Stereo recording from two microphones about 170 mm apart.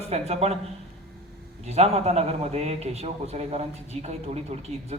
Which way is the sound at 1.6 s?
40° right (ahead or behind).